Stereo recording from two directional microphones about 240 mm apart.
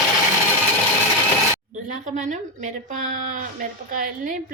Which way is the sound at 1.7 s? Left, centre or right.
Right.